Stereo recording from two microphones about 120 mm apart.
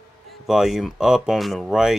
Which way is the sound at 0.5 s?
Centre (ahead or behind).